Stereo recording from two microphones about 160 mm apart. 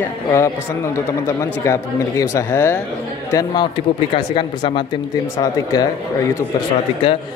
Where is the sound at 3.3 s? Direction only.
30° left (ahead or behind).